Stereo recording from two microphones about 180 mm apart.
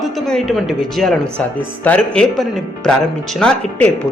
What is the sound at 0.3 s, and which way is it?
A man's voice, centre (ahead or behind).